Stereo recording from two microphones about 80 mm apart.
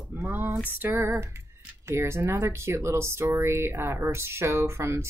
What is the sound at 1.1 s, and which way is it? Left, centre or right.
Speech, right.